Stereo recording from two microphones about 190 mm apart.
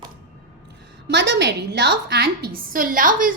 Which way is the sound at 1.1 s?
65° right (ahead or behind).